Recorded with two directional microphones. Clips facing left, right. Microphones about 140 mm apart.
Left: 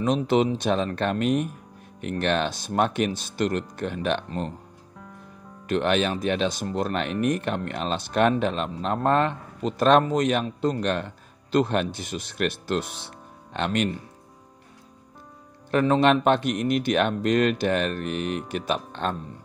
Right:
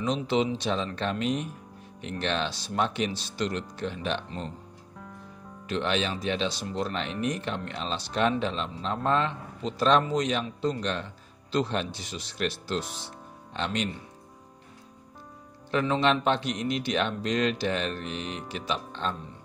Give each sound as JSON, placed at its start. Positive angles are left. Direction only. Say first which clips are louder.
{"t": 0.0, "sound": "speech", "louder": "left 5 dB", "side_deg": 55}
{"t": 5.7, "sound": "speech", "louder": "left 5 dB", "side_deg": 55}
{"t": 15.7, "sound": "speech", "louder": "left 5 dB", "side_deg": 50}